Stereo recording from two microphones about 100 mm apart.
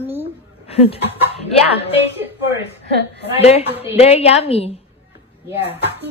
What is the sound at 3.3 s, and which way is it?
A woman's voice, 90° left.